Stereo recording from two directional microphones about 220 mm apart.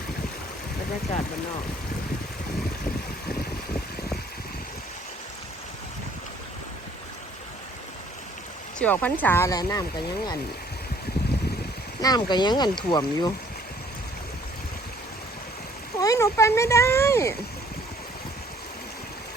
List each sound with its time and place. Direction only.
8.8 s speech: 5° left (ahead or behind)
12.0 s speech: 20° left (ahead or behind)
16.0 s speech: 15° left (ahead or behind)